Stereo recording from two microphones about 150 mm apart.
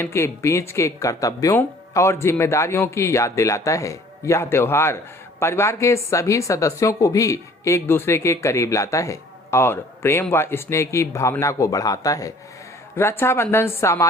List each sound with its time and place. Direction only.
0.0 s a woman's voice: 15° left (ahead or behind)